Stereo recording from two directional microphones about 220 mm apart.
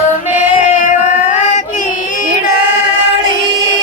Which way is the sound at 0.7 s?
35° left (ahead or behind).